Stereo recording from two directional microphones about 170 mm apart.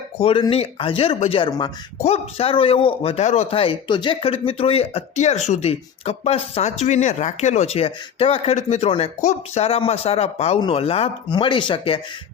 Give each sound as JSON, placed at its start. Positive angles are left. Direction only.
{"t": 0.2, "sound": "a man's voice", "side_deg": 35}
{"t": 2.0, "sound": "a man's voice", "side_deg": 40}